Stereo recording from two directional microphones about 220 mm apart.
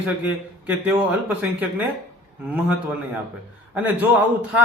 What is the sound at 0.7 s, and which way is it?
Speech, 5° right (ahead or behind).